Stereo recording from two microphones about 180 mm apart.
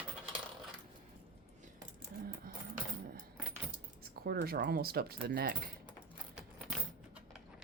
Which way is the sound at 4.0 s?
60° right (ahead or behind).